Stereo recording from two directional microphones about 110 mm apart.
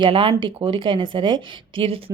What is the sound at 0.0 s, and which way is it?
Speech, 50° right (ahead or behind).